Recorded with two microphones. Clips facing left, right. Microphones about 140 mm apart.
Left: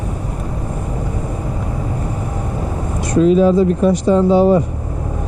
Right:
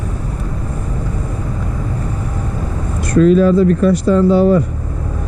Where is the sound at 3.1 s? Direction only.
10° left (ahead or behind).